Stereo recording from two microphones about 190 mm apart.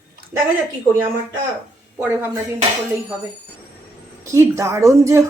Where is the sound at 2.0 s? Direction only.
10° right (ahead or behind).